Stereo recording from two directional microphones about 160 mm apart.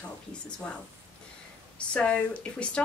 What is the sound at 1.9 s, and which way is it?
Speech, 5° left (ahead or behind).